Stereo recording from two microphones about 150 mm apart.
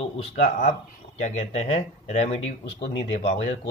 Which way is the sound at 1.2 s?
50° left (ahead or behind).